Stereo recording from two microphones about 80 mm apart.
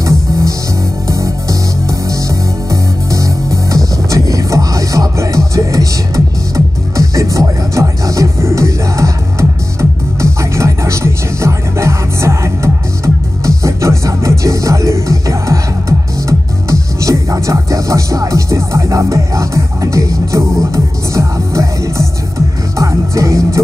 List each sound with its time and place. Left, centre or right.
0.0 s music: right